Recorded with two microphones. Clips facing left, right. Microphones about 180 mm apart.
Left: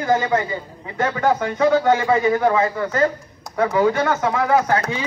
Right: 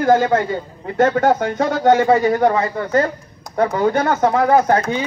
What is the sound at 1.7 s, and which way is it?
Speech, 65° right (ahead or behind).